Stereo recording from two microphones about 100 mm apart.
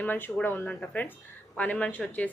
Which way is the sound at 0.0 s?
20° left (ahead or behind).